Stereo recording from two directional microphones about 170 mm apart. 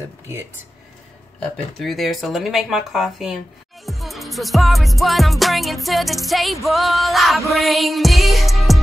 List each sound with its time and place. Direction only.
1.4 s music: centre (ahead or behind)